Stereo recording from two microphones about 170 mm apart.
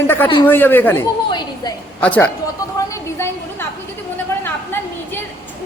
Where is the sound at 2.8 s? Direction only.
20° left (ahead or behind).